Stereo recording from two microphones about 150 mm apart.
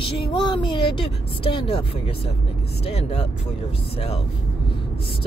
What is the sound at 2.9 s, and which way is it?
Speech, 45° left (ahead or behind).